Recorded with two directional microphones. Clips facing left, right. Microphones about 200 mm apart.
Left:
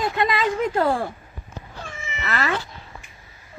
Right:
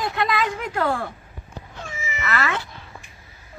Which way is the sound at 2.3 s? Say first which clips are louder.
Left 1 dB; 30° left (ahead or behind).